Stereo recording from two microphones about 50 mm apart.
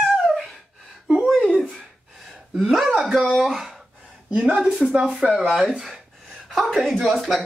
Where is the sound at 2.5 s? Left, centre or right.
Centre.